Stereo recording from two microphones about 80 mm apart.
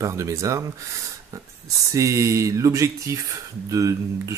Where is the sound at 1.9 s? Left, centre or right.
Right.